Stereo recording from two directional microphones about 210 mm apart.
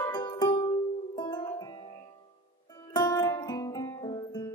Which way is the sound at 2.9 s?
20° left (ahead or behind).